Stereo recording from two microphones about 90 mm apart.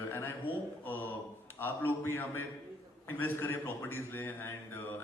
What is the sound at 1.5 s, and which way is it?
A man's voice, 25° left (ahead or behind).